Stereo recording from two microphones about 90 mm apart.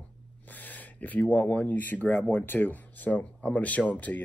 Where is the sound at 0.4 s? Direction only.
20° left (ahead or behind).